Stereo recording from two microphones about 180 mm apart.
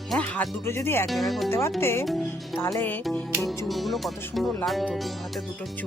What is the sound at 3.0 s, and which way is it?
Speech, centre (ahead or behind).